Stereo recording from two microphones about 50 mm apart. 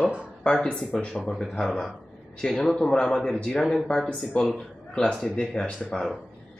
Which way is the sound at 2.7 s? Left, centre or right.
Centre.